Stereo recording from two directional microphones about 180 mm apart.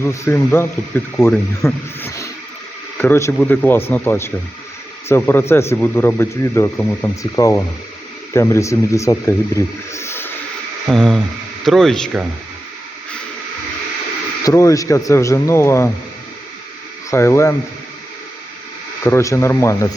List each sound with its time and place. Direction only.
0.0 s speech: 15° left (ahead or behind)
9.9 s a sound: 15° left (ahead or behind)
10.8 s speech: centre (ahead or behind)
14.4 s speech: 15° left (ahead or behind)
17.1 s speech: 15° left (ahead or behind)
19.0 s speech: 15° left (ahead or behind)